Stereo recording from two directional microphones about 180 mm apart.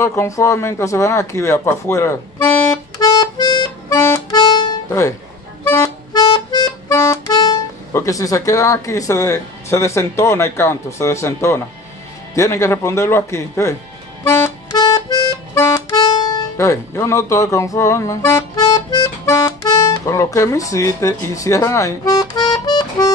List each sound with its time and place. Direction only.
0.0 s a sound: 15° left (ahead or behind)
5.6 s music: 15° left (ahead or behind)
12.4 s speech: 15° left (ahead or behind)
14.2 s music: 15° left (ahead or behind)
20.1 s speech: 15° left (ahead or behind)